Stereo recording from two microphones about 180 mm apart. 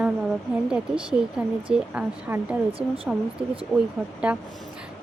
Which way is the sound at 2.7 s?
30° right (ahead or behind).